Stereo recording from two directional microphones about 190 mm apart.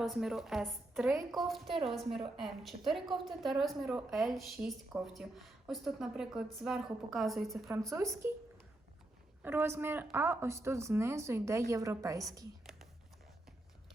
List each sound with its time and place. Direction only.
0.0 s a woman's voice: centre (ahead or behind)
7.7 s a woman's voice: 15° right (ahead or behind)
9.4 s a woman's voice: 10° right (ahead or behind)